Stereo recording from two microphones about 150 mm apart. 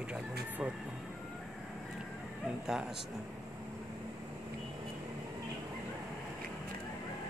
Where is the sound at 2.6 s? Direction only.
5° right (ahead or behind).